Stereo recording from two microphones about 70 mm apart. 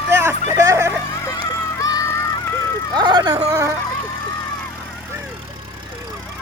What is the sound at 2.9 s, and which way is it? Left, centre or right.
Vehicle, right.